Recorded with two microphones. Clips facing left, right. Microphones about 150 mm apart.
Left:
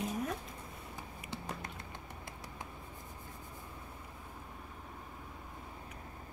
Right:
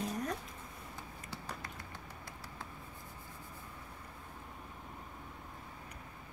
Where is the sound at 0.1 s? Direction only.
5° left (ahead or behind).